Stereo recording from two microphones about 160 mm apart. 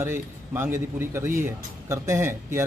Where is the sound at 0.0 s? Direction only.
15° right (ahead or behind).